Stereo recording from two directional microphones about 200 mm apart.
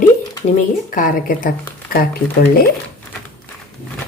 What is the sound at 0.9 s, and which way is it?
Speech, 45° left (ahead or behind).